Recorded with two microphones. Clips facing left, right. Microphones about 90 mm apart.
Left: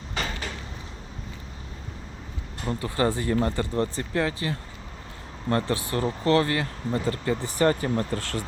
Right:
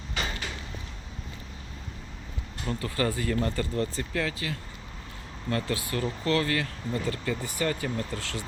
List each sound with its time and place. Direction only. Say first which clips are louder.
2.6 s speech: left 4 dB; 25° left (ahead or behind)
5.6 s speech: left 4 dB; 30° left (ahead or behind); by 8.4 s 50° left (ahead or behind)